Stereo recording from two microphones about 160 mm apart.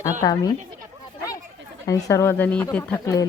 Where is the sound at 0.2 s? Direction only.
25° left (ahead or behind).